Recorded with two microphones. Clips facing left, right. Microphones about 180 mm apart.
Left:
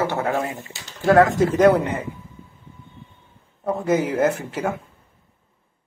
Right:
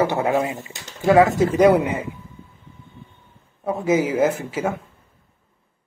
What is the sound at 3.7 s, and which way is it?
Speech, 5° right (ahead or behind).